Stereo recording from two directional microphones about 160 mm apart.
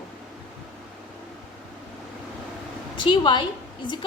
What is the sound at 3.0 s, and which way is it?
Speech, 30° left (ahead or behind).